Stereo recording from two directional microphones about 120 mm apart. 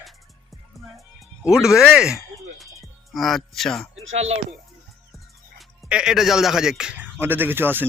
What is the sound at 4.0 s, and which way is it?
Speech, 60° right (ahead or behind).